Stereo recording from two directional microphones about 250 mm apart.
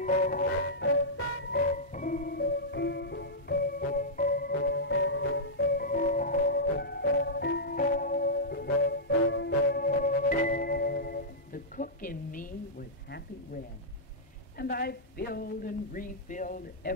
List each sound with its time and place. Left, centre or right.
0.0 s music: left
1.6 s music: left
14.6 s a sound: left